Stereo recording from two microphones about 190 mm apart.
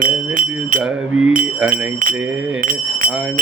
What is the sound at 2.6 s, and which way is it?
Speech, 45° right (ahead or behind).